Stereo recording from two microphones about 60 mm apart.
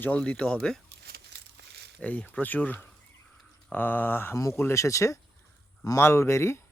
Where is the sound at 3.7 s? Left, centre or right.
Left.